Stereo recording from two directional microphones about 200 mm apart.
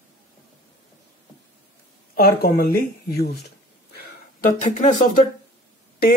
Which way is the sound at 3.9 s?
40° left (ahead or behind).